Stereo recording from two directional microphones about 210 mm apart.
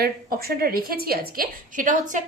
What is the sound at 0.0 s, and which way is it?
A woman's voice, 45° right (ahead or behind).